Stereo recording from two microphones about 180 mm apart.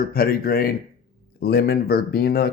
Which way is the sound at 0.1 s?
55° left (ahead or behind).